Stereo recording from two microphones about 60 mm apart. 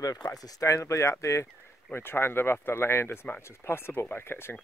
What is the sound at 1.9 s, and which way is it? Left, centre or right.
Speech, left.